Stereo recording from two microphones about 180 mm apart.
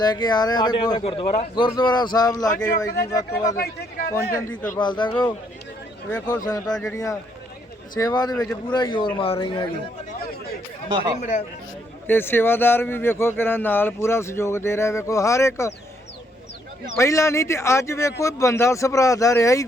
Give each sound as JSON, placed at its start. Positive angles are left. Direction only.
{"t": 0.0, "sound": "speech", "side_deg": 25}
{"t": 3.5, "sound": "a sound", "side_deg": 55}
{"t": 4.8, "sound": "speech", "side_deg": 25}
{"t": 6.1, "sound": "speech", "side_deg": 10}
{"t": 6.3, "sound": "speech", "side_deg": 20}
{"t": 10.8, "sound": "speech", "side_deg": -25}
{"t": 11.2, "sound": "speech", "side_deg": 45}
{"t": 12.0, "sound": "speech", "side_deg": 10}
{"t": 17.0, "sound": "speech", "side_deg": 15}